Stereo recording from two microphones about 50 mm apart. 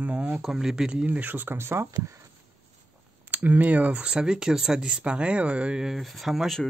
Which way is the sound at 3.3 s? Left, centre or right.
Right.